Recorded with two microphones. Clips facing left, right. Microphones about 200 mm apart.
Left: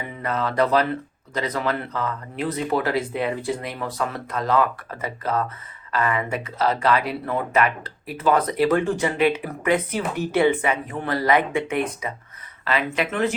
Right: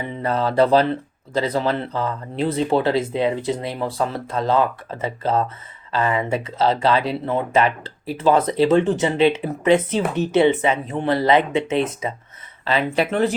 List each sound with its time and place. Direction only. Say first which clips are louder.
0.0 s speech: right 4 dB; 30° right (ahead or behind)